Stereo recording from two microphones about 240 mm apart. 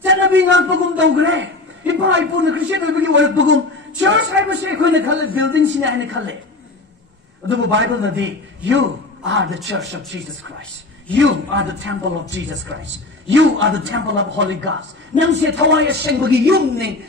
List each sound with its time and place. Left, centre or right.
0.0 s a sound: right
0.4 s a man's voice: right
7.4 s a man's voice: right
10.1 s a man's voice: right